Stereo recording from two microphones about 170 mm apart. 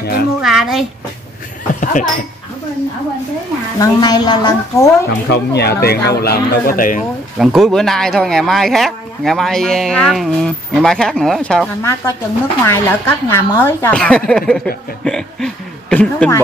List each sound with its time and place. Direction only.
0.0 s speech: 65° left (ahead or behind)
0.4 s speech: centre (ahead or behind)
1.8 s speech: 50° left (ahead or behind)
3.8 s a woman's voice: 25° left (ahead or behind)
5.3 s speech: 75° left (ahead or behind); by 7.1 s 50° left (ahead or behind)
7.3 s speech: centre (ahead or behind)
11.8 s a woman's voice: 15° left (ahead or behind)